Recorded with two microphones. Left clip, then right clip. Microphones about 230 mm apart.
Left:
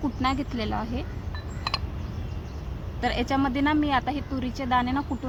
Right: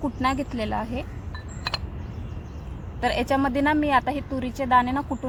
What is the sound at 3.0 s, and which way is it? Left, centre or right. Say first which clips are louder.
Speech: right 3 dB; right.